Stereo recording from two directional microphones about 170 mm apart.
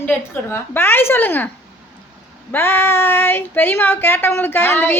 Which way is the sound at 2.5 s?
15° left (ahead or behind).